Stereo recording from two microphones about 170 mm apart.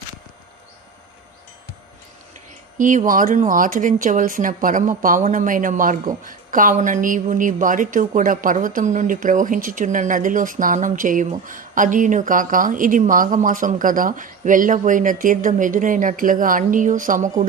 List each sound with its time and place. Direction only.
2.7 s a woman's voice: 50° right (ahead or behind)